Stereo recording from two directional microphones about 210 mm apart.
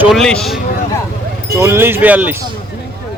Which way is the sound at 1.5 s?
10° right (ahead or behind).